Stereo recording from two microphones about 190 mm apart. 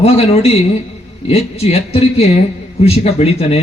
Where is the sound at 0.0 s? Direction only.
30° left (ahead or behind).